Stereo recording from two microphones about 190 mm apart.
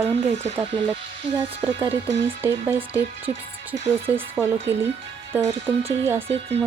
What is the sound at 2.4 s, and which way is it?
Speech, 10° right (ahead or behind).